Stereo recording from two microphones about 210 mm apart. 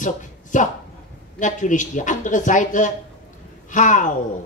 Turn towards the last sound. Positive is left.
turn(degrees=35)  # may be behind; listen again after turning